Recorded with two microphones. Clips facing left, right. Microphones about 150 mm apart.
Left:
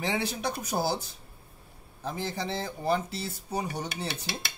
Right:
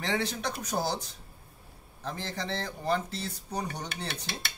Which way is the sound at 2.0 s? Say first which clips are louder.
Left 2 dB; 10° left (ahead or behind).